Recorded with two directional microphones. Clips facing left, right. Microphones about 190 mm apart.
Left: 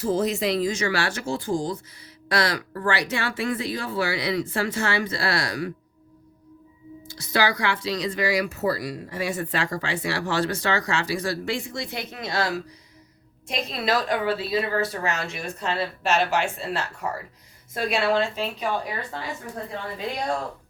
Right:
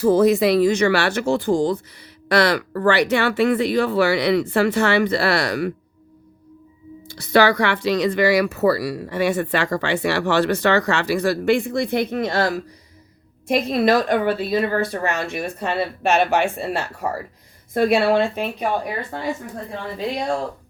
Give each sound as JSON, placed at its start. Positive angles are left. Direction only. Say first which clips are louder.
{"t": 0.0, "sound": "speech", "louder": "right 8 dB", "side_deg": -65}
{"t": 7.1, "sound": "speech", "louder": "right 8 dB", "side_deg": -60}
{"t": 13.5, "sound": "speech", "louder": "right 8 dB", "side_deg": -55}